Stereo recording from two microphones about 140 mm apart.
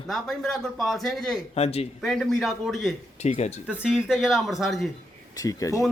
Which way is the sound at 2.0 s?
Centre (ahead or behind).